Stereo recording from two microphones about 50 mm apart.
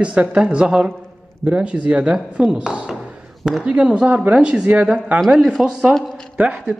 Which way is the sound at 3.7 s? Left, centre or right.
Centre.